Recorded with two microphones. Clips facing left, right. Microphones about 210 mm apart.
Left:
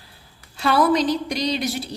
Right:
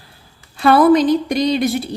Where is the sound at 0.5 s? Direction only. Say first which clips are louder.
Right 7 dB; 55° right (ahead or behind).